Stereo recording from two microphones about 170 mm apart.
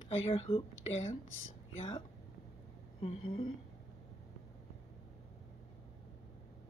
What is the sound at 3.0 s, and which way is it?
Speech, 30° left (ahead or behind).